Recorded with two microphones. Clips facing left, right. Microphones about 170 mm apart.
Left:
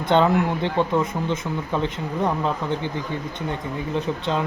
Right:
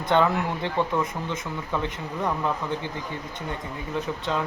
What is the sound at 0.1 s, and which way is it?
Speech, 25° left (ahead or behind).